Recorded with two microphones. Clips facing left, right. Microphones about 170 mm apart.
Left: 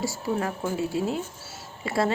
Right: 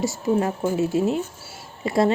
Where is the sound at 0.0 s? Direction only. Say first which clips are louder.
Right 6 dB; 20° right (ahead or behind).